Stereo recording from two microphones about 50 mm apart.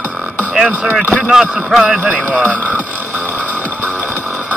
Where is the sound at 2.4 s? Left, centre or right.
Right.